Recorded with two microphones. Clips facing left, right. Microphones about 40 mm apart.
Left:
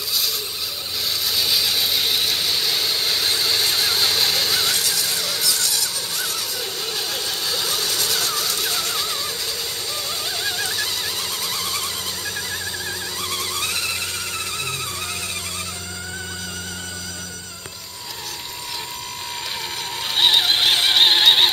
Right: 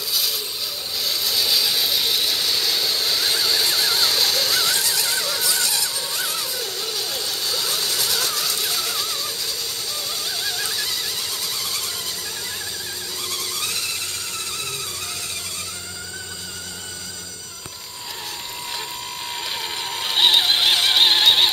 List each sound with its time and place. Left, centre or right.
1.0 s vehicle: centre
5.4 s a sound: right
6.6 s vehicle: centre
10.3 s a sound: centre
13.3 s vehicle: centre
20.0 s mechanisms: centre